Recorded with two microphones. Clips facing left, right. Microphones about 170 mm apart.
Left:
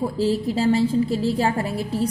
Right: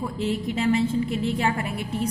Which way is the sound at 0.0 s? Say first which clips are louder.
Left 5 dB; 30° left (ahead or behind).